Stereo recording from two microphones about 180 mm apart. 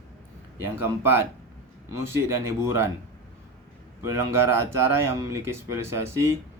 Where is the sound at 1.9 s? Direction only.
15° right (ahead or behind).